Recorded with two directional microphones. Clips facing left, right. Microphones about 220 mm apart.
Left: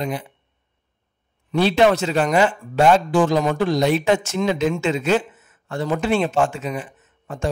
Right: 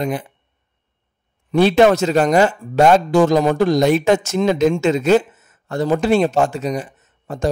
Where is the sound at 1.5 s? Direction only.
50° right (ahead or behind).